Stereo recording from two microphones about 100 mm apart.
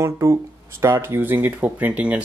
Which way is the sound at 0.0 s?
30° right (ahead or behind).